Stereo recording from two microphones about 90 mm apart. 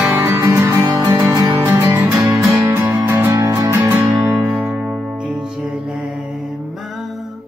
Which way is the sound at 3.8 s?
20° right (ahead or behind).